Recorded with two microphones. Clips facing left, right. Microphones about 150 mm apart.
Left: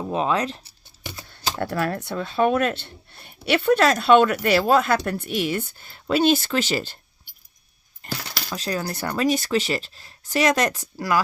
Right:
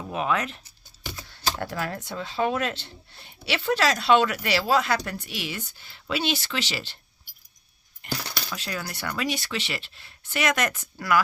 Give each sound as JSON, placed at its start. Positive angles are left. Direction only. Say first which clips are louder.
{"t": 0.0, "sound": "speech", "louder": "left 4 dB", "side_deg": 30}
{"t": 1.5, "sound": "speech", "louder": "left 6 dB", "side_deg": 60}
{"t": 8.0, "sound": "speech", "louder": "left 1 dB", "side_deg": 40}